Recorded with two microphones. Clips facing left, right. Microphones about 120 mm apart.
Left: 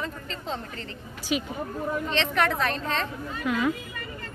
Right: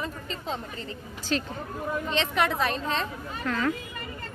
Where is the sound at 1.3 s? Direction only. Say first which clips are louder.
Left 1 dB; 10° left (ahead or behind).